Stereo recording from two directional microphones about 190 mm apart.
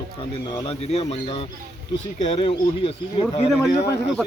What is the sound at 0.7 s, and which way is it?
A man's voice, 35° left (ahead or behind).